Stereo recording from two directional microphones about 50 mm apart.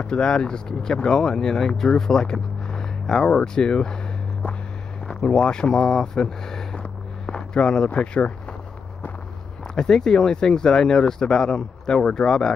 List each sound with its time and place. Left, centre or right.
0.0 s speech: centre
5.0 s speech: centre
6.8 s a sound: centre
7.9 s speech: left
9.8 s speech: centre